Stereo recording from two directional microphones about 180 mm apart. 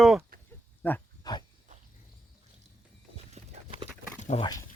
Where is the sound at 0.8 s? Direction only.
10° left (ahead or behind).